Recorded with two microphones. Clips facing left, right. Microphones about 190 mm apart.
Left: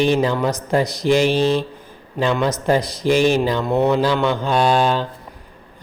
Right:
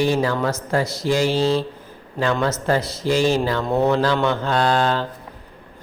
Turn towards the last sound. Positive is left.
turn(degrees=15)  # may be behind; listen again after turning